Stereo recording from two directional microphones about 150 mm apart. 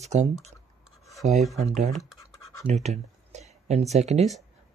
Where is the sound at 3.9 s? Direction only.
45° right (ahead or behind).